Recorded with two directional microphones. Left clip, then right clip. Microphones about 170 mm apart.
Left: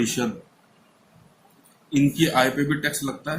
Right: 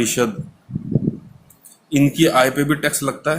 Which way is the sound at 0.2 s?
70° right (ahead or behind).